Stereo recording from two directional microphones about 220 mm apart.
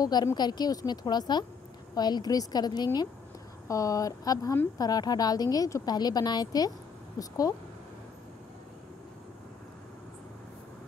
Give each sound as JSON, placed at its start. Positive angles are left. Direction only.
{"t": 0.0, "sound": "a woman's voice", "side_deg": 15}